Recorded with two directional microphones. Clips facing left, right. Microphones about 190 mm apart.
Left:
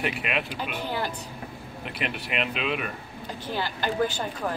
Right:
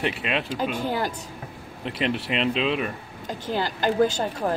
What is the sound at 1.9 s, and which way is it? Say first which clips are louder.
Speech: right 7 dB; 30° right (ahead or behind).